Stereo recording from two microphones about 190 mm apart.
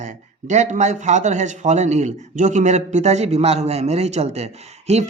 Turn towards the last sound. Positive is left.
turn(degrees=-35)  # may be behind; listen again after turning